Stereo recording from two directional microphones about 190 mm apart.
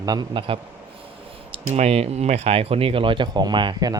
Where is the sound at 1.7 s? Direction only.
35° right (ahead or behind).